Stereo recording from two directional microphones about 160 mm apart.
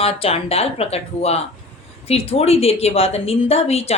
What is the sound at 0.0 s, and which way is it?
Speech, 40° left (ahead or behind).